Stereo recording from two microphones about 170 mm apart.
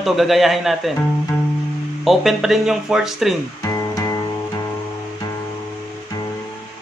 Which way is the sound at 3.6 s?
20° left (ahead or behind).